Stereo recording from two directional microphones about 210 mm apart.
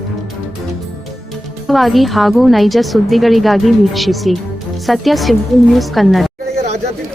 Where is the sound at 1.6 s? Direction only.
Centre (ahead or behind).